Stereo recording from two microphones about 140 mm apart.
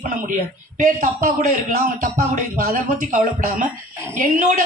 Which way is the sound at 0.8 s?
70° right (ahead or behind).